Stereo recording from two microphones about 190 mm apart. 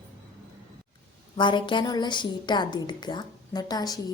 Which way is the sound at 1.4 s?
25° left (ahead or behind).